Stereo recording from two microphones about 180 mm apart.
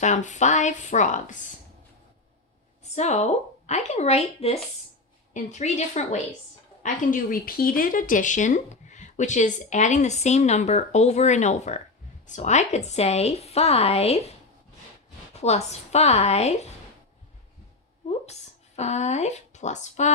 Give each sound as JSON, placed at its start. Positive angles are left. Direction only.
{"t": 0.0, "sound": "a woman's voice", "side_deg": 40}
{"t": 2.9, "sound": "speech", "side_deg": 40}
{"t": 15.4, "sound": "speech", "side_deg": 35}
{"t": 18.0, "sound": "a sound", "side_deg": 35}
{"t": 18.8, "sound": "speech", "side_deg": 40}